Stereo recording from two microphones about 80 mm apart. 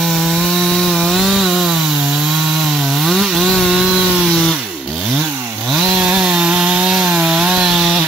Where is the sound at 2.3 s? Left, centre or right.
Centre.